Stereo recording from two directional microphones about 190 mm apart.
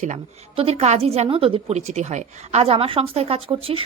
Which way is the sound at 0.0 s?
35° right (ahead or behind).